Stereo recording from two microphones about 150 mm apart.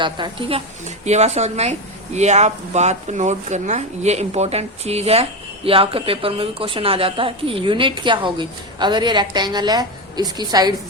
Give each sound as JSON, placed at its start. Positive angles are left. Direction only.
{"t": 0.0, "sound": "a woman's voice", "side_deg": -35}